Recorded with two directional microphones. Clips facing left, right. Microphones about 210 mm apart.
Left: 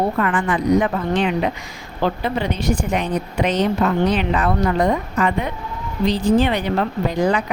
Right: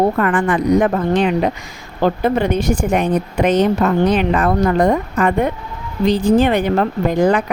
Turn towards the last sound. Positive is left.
turn(degrees=-50)  # may be behind; listen again after turning